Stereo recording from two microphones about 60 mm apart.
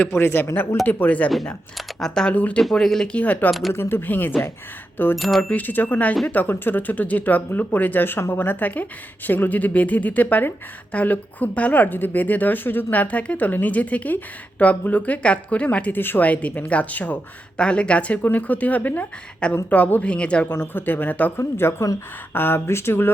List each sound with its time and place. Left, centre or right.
0.2 s speech: left
2.0 s speech: centre
2.3 s speech: left
2.6 s speech: centre
3.2 s speech: left
3.7 s speech: left
5.1 s speech: centre
5.4 s speech: left
16.0 s speech: left; by 20.5 s centre
20.5 s speech: left
21.3 s speech: left